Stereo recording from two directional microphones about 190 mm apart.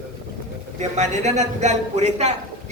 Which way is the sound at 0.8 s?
35° right (ahead or behind).